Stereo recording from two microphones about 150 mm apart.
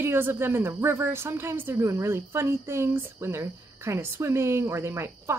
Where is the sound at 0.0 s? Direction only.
15° right (ahead or behind).